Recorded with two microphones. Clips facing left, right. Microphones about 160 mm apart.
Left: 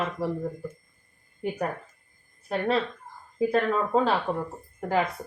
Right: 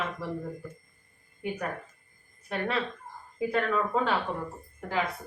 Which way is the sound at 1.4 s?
35° left (ahead or behind).